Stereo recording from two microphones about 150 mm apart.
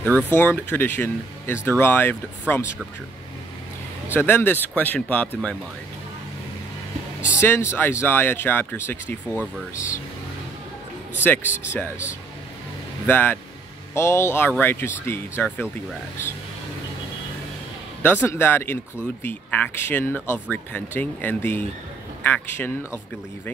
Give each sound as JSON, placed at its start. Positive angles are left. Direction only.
{"t": 0.3, "sound": "speech", "side_deg": 10}
{"t": 4.1, "sound": "speech", "side_deg": 15}
{"t": 7.3, "sound": "speech", "side_deg": 15}
{"t": 11.2, "sound": "speech", "side_deg": 15}
{"t": 13.0, "sound": "speech", "side_deg": 15}
{"t": 18.0, "sound": "speech", "side_deg": 15}